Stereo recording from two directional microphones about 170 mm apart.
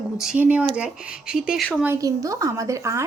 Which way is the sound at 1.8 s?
15° right (ahead or behind).